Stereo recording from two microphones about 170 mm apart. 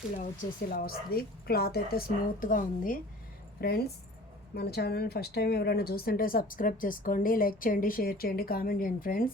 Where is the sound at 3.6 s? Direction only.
65° left (ahead or behind).